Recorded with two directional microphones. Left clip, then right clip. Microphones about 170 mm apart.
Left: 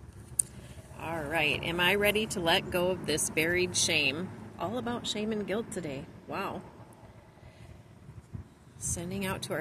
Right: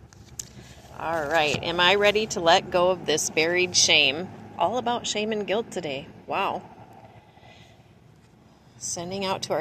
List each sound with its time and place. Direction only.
0.9 s speech: 15° left (ahead or behind)
8.9 s speech: 25° left (ahead or behind)